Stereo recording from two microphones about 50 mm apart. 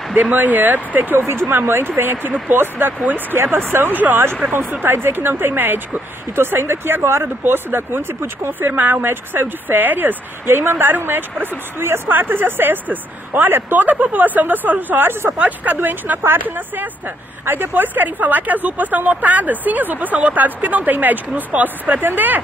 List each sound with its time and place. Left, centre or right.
0.1 s speech: right
1.2 s speech: right
8.5 s speech: right
15.3 s speech: right
15.7 s speech: right